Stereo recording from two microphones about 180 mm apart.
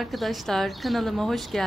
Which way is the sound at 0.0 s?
Centre (ahead or behind).